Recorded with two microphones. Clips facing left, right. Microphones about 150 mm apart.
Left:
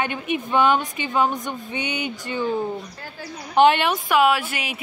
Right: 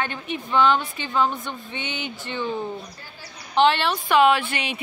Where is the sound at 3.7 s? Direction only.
10° left (ahead or behind).